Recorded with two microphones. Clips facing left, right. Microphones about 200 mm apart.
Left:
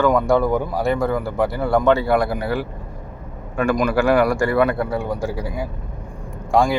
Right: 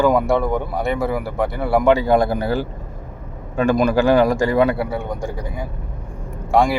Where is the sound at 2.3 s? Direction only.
30° right (ahead or behind).